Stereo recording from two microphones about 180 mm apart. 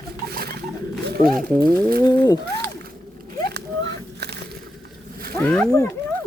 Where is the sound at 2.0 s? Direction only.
20° left (ahead or behind).